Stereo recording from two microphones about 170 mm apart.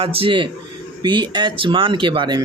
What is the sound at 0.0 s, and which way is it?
A man's voice, 30° right (ahead or behind).